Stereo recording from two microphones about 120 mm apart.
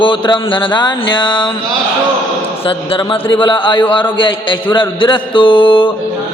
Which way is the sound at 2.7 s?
45° left (ahead or behind).